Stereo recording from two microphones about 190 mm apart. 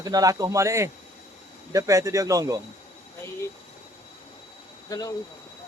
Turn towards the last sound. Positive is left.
turn(degrees=20)  # may be behind; listen again after turning